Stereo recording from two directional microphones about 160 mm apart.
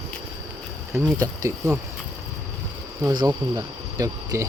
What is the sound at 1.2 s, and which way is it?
Speech, 20° right (ahead or behind).